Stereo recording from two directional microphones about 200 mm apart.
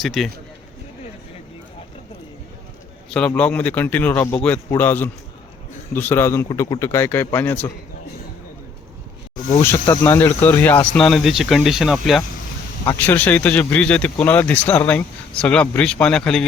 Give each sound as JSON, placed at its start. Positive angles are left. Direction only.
{"t": 0.0, "sound": "speech", "side_deg": 0}
{"t": 3.1, "sound": "speech", "side_deg": 5}
{"t": 9.8, "sound": "speech", "side_deg": 15}
{"t": 12.8, "sound": "speech", "side_deg": 10}